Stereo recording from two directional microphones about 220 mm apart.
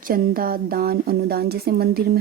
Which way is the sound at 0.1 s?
40° right (ahead or behind).